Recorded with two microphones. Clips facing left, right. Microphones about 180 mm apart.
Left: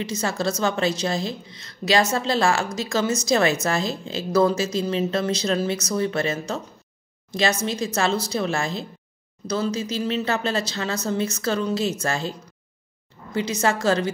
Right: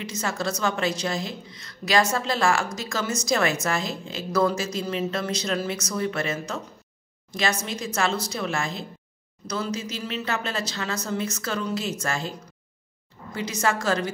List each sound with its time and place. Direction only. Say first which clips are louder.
0.0 s a woman's voice: left 4 dB; 30° left (ahead or behind)